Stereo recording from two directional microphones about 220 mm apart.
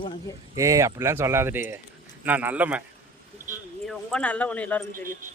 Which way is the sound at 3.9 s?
5° left (ahead or behind).